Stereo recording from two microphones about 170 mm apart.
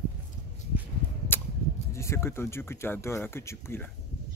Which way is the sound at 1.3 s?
15° left (ahead or behind).